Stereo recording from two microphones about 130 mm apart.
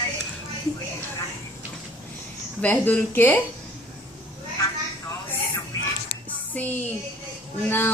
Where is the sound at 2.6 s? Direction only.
10° left (ahead or behind).